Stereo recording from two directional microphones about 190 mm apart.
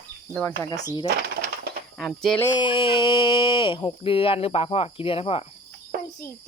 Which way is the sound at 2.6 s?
25° left (ahead or behind).